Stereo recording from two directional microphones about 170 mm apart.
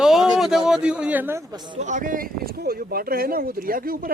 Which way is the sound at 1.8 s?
50° right (ahead or behind).